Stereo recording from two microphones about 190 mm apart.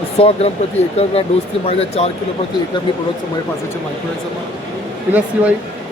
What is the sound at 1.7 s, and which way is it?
Speech, 30° left (ahead or behind).